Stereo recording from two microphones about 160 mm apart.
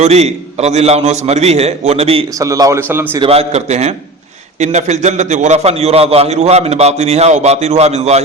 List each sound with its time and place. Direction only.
0.0 s a man's voice: 40° right (ahead or behind)
2.4 s a man's voice: 20° right (ahead or behind)
3.2 s a man's voice: 40° right (ahead or behind)